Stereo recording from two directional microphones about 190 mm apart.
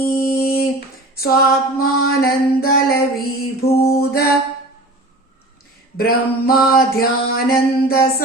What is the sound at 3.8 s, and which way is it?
Music, 55° left (ahead or behind).